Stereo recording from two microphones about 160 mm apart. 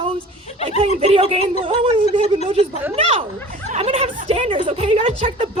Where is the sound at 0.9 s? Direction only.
35° right (ahead or behind).